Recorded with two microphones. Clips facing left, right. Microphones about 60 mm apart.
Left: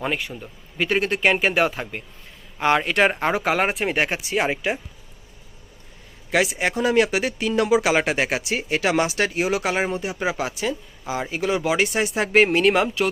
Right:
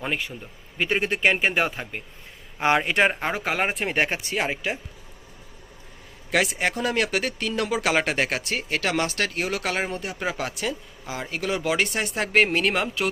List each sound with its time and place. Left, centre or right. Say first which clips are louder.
0.0 s speech: left 3 dB; centre
2.6 s speech: left 2 dB; centre
3.0 s speech: left 3 dB; centre
6.3 s speech: left 2 dB; centre